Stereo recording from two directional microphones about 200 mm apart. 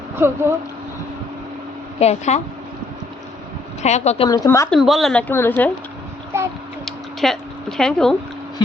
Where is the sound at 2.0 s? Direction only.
35° left (ahead or behind).